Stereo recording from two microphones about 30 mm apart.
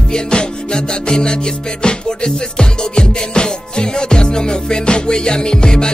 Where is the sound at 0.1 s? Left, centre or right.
Left.